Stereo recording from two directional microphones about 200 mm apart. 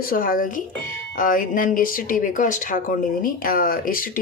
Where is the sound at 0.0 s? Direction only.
45° left (ahead or behind).